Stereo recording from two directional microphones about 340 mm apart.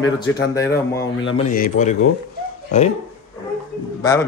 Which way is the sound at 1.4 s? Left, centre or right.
Left.